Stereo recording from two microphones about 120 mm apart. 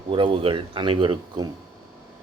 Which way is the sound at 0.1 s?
45° right (ahead or behind).